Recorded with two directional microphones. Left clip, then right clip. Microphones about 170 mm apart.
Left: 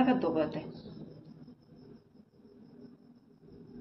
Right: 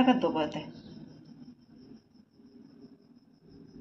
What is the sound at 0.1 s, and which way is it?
Speech, 35° right (ahead or behind).